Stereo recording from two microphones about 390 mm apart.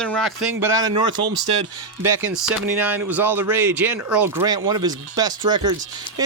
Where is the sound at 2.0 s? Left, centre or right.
Centre.